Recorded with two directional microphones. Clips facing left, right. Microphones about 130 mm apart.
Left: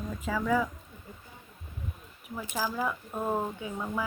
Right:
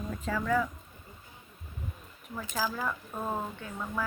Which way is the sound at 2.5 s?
10° left (ahead or behind).